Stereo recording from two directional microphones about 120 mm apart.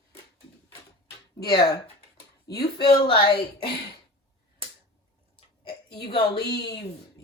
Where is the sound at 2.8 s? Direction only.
45° left (ahead or behind).